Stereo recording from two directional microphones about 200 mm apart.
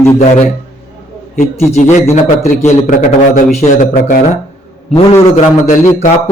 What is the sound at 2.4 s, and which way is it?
A man's voice, 35° left (ahead or behind).